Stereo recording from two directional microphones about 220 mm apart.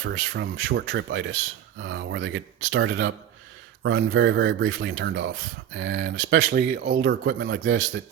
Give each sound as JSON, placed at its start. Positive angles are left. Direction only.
{"t": 0.0, "sound": "speech", "side_deg": -55}